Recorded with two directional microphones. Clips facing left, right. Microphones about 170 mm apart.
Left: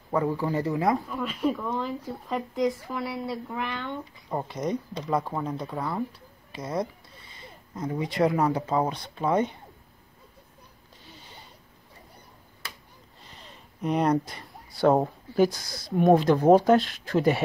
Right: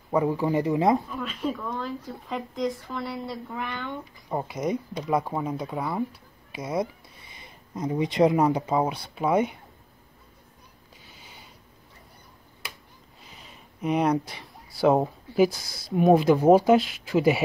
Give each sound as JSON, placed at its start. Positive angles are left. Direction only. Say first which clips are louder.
{"t": 0.1, "sound": "speech", "louder": "right 3 dB", "side_deg": -15}
{"t": 1.1, "sound": "speech", "louder": "left 3 dB", "side_deg": 10}
{"t": 13.2, "sound": "speech", "louder": "even", "side_deg": -5}